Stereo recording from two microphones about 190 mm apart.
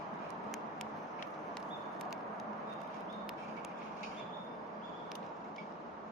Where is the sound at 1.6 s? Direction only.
Centre (ahead or behind).